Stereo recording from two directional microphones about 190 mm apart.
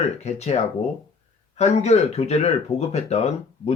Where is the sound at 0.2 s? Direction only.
35° left (ahead or behind).